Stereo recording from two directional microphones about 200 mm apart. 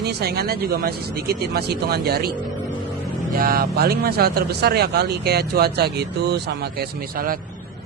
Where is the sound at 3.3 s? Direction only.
45° right (ahead or behind).